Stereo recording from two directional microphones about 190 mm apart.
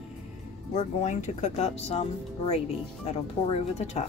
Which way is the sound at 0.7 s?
35° left (ahead or behind).